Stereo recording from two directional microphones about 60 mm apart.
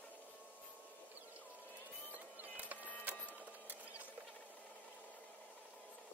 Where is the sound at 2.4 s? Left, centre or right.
Right.